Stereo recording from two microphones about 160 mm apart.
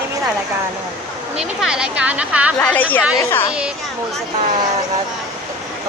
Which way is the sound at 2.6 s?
10° left (ahead or behind).